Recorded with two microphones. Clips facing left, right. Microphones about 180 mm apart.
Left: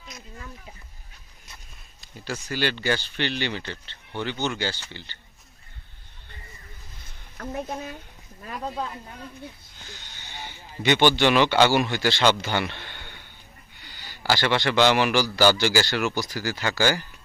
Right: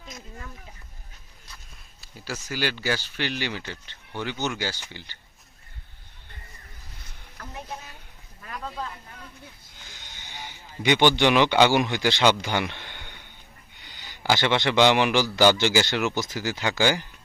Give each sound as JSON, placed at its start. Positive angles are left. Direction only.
{"t": 2.0, "sound": "speech", "side_deg": -5}
{"t": 7.3, "sound": "a woman's voice", "side_deg": 50}
{"t": 9.8, "sound": "a man's voice", "side_deg": -10}